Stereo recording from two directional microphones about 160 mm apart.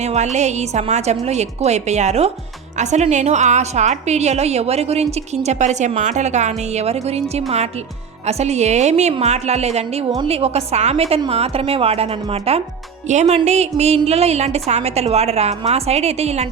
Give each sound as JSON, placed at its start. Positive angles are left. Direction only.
{"t": 0.0, "sound": "a woman's voice", "side_deg": -45}